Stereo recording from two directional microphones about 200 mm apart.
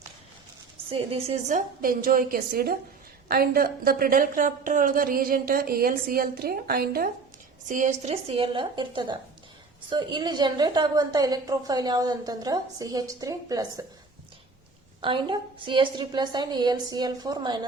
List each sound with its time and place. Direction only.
0.9 s a woman's voice: 30° right (ahead or behind); by 7.1 s 50° right (ahead or behind)
7.7 s a woman's voice: 35° right (ahead or behind); by 13.7 s 20° right (ahead or behind)
15.0 s a woman's voice: 25° right (ahead or behind)